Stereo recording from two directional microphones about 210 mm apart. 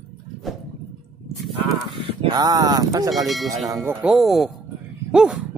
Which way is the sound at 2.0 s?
20° right (ahead or behind).